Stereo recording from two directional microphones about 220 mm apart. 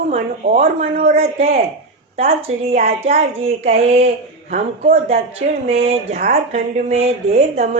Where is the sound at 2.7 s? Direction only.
30° right (ahead or behind).